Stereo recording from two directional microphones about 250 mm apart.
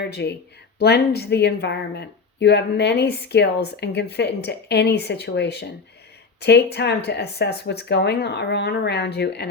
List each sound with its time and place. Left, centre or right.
0.0 s speech: left